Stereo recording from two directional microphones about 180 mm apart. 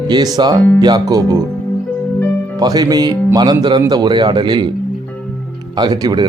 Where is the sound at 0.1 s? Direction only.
20° right (ahead or behind).